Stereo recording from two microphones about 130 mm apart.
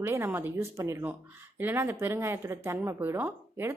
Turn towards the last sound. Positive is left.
turn(degrees=-15)  # may be behind; listen again after turning